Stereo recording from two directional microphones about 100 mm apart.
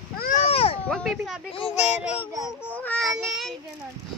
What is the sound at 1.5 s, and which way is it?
Speech, 75° left (ahead or behind).